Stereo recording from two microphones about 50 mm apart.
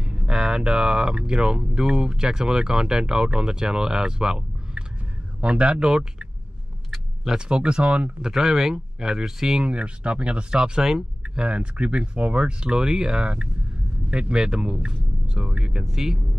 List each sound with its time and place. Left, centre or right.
0.0 s speech: centre
7.3 s speech: centre
8.2 s speech: centre
9.7 s speech: right
11.4 s speech: right; by 16.2 s centre